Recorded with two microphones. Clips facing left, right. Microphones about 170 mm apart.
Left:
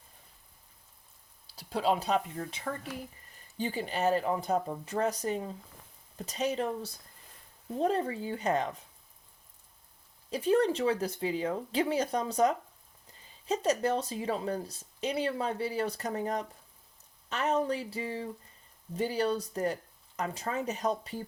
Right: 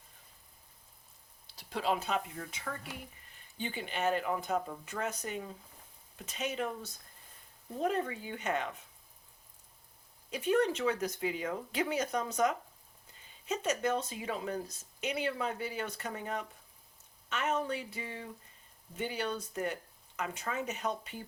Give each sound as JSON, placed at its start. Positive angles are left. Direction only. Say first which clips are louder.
{"t": 1.5, "sound": "speech", "louder": "left 4 dB", "side_deg": 35}
{"t": 10.2, "sound": "speech", "louder": "left 3 dB", "side_deg": 35}